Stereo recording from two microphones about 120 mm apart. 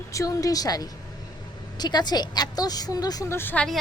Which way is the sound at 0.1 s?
30° left (ahead or behind).